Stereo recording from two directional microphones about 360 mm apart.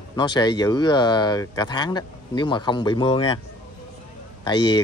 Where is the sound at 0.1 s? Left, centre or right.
Centre.